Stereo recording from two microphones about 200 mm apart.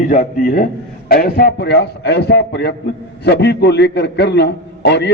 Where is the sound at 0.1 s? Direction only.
45° left (ahead or behind).